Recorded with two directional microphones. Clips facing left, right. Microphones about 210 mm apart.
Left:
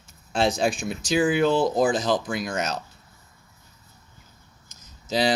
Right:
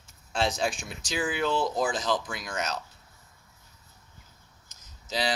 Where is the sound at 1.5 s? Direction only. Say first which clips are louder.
Left 7 dB; 40° left (ahead or behind).